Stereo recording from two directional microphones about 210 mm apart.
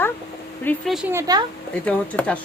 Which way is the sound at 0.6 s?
10° left (ahead or behind).